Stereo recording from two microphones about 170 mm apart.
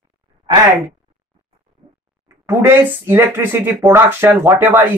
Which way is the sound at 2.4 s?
15° right (ahead or behind).